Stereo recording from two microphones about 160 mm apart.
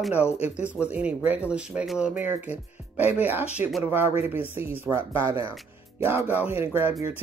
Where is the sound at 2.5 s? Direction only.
40° left (ahead or behind).